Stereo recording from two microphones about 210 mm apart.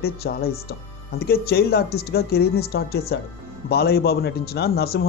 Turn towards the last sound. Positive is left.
turn(degrees=50)  # may be behind; listen again after turning